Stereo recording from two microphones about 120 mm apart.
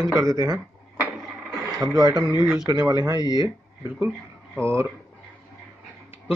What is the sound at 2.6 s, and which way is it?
Speech, 35° right (ahead or behind).